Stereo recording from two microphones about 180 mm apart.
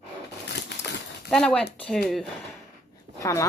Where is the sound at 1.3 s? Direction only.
5° left (ahead or behind).